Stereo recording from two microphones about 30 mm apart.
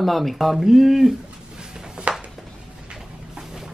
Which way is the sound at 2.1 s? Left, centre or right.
Right.